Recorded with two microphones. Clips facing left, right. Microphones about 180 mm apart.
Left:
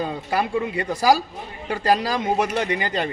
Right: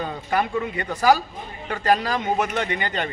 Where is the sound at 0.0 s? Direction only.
30° left (ahead or behind).